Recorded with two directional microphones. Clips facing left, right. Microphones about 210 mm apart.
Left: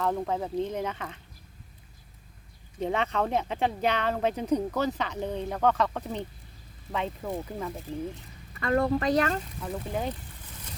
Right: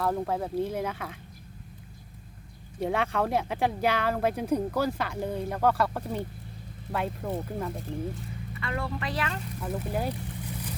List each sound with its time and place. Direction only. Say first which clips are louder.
0.0 s speech: even; 5° right (ahead or behind)
2.8 s speech: even; 10° right (ahead or behind)
8.6 s speech: left 9 dB; 40° left (ahead or behind)
9.6 s speech: right 1 dB; 5° right (ahead or behind)